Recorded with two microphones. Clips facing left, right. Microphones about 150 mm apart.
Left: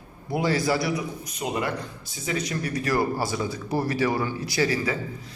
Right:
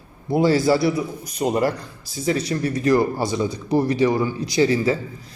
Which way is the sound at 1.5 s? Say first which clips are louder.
Right 7 dB; 40° right (ahead or behind).